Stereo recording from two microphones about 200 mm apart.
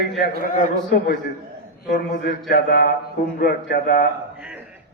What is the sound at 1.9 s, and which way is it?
A man's voice, 55° left (ahead or behind).